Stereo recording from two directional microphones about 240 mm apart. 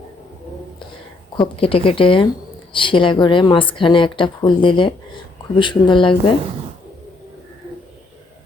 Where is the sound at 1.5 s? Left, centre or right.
Left.